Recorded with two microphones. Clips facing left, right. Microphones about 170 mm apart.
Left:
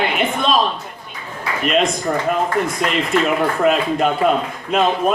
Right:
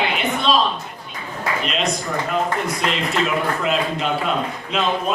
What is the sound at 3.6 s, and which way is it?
A woman's voice, 50° left (ahead or behind).